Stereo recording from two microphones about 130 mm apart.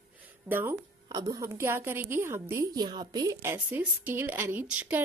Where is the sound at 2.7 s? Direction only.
35° right (ahead or behind).